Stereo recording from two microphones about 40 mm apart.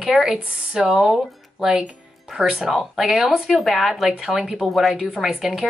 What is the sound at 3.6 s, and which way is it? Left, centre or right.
Speech, centre.